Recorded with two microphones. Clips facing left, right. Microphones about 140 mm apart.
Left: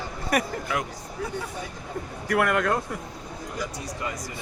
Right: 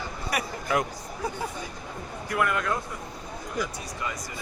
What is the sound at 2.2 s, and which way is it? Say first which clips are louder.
Speech: left 4 dB; 70° left (ahead or behind).